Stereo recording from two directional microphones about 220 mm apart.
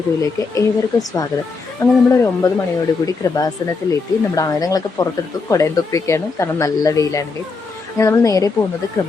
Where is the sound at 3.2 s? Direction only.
15° left (ahead or behind).